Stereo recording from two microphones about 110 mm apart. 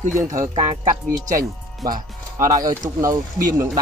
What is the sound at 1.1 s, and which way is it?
Speech, 30° right (ahead or behind).